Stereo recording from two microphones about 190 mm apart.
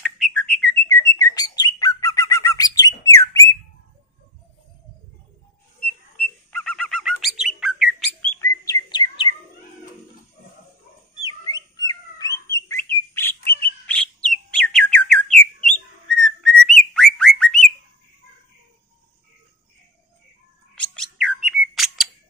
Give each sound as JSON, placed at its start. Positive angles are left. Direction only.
{"t": 0.0, "sound": "bird", "side_deg": 5}
{"t": 0.7, "sound": "bird", "side_deg": 15}
{"t": 6.5, "sound": "bird", "side_deg": 5}
{"t": 8.4, "sound": "bird", "side_deg": 20}
{"t": 11.5, "sound": "bird", "side_deg": 20}
{"t": 13.5, "sound": "bird", "side_deg": 55}
{"t": 13.8, "sound": "bird", "side_deg": 5}
{"t": 20.7, "sound": "bird", "side_deg": 5}